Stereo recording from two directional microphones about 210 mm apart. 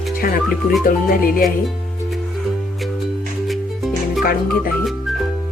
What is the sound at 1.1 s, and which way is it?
Speech, 45° left (ahead or behind).